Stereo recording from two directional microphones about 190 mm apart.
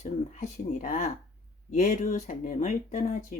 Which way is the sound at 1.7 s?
40° left (ahead or behind).